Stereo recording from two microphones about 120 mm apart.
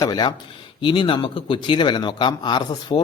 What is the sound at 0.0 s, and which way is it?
Speech, 35° left (ahead or behind).